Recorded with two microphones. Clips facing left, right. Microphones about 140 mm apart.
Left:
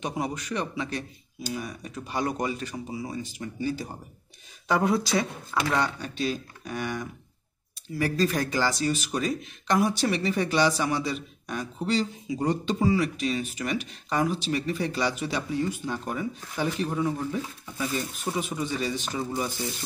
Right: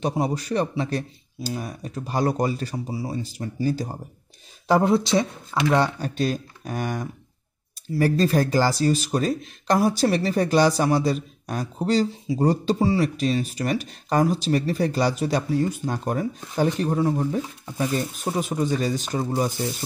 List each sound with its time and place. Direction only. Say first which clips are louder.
0.0 s speech: right 6 dB; 30° right (ahead or behind)